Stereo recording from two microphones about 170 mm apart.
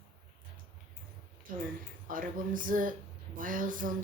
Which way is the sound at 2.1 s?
55° right (ahead or behind).